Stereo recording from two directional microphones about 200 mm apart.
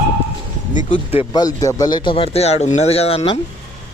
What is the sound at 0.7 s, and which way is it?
Speech, 35° left (ahead or behind).